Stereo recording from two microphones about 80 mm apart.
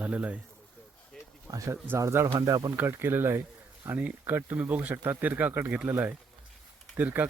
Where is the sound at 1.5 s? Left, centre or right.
Right.